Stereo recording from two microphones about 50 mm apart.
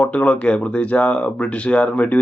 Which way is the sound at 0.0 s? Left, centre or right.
Left.